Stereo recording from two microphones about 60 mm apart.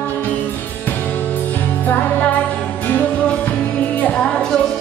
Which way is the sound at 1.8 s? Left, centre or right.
Left.